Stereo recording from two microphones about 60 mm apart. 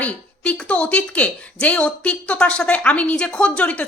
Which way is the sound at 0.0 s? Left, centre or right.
Centre.